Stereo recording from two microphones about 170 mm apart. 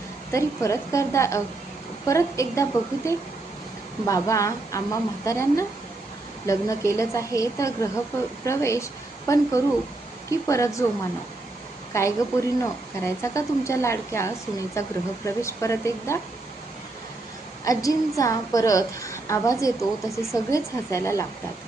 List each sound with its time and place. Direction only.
0.3 s a woman's voice: 20° left (ahead or behind)
11.9 s a woman's voice: 20° left (ahead or behind)
17.7 s a woman's voice: 20° left (ahead or behind)